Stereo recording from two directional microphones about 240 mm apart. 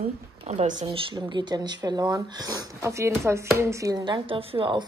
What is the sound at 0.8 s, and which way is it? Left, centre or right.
Speech, centre.